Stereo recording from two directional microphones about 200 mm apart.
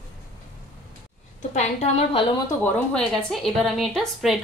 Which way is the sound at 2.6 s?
5° left (ahead or behind).